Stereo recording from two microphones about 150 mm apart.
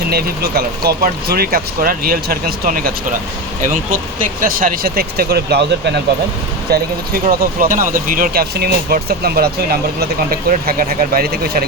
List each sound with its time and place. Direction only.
0.1 s speech: 90° right; by 2.9 s 75° right (ahead or behind)
4.2 s speech: 70° right (ahead or behind); by 5.6 s 90° right
6.7 s speech: 80° right
10.5 s speech: 75° right (ahead or behind); by 11.6 s 90° right